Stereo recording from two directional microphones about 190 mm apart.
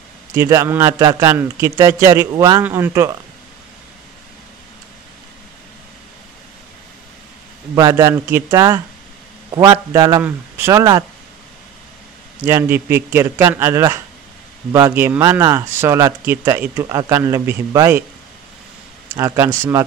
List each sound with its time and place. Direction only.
0.3 s speech: 15° right (ahead or behind)
7.7 s a man's voice: 15° right (ahead or behind)
12.4 s speech: 10° right (ahead or behind)
19.1 s speech: 15° right (ahead or behind)